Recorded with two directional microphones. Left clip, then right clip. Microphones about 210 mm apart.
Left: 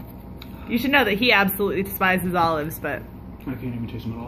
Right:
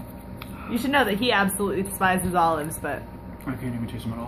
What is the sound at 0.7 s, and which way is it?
A woman's voice, 15° left (ahead or behind).